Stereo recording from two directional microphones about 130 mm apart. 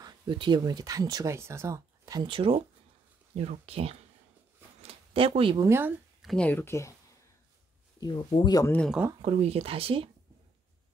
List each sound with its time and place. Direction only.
0.0 s speech: 35° right (ahead or behind)
2.2 s speech: 45° right (ahead or behind)
4.8 s zipper: 45° right (ahead or behind)
5.6 s speech: 20° right (ahead or behind)
6.2 s speech: 10° left (ahead or behind)
8.0 s speech: 35° left (ahead or behind)
9.2 s speech: 50° right (ahead or behind)